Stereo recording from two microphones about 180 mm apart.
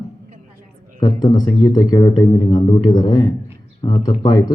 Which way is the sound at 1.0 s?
25° left (ahead or behind).